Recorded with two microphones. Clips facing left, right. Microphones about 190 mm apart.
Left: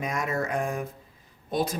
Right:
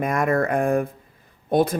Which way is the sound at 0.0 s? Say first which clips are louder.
Right 8 dB; 55° right (ahead or behind).